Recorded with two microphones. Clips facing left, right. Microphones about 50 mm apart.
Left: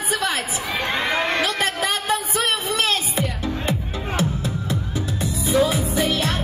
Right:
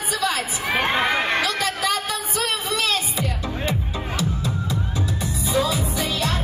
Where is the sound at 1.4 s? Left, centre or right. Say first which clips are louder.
Left 1 dB; left.